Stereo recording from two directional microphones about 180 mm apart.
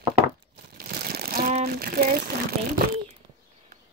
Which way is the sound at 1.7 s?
55° right (ahead or behind).